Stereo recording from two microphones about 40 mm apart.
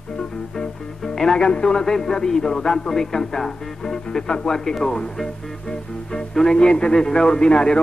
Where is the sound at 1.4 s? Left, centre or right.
Centre.